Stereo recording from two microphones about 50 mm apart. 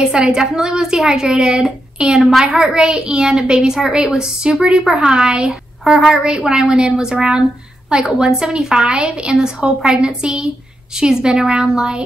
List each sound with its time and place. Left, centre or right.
0.0 s a woman's voice: centre